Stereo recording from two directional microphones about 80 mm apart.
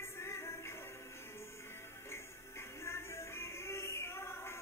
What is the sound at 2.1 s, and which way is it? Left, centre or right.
Music, left.